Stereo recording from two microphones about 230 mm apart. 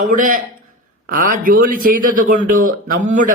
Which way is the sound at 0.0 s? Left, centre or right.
Right.